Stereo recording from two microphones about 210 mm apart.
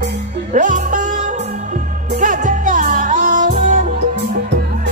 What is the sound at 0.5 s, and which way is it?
Music, 35° right (ahead or behind).